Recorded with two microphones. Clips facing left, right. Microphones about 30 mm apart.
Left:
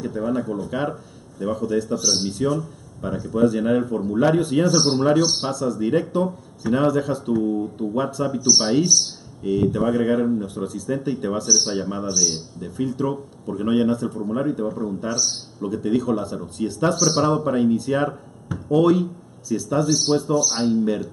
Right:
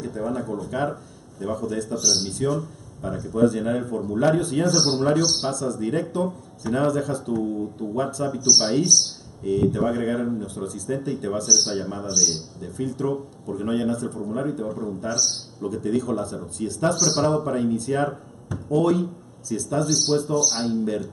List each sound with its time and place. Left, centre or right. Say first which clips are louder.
0.0 s a man's voice: left 4 dB; centre
20.8 s a man's voice: left 3 dB; centre